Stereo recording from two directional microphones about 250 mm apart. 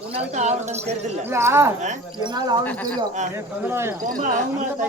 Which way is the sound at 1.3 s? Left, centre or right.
Centre.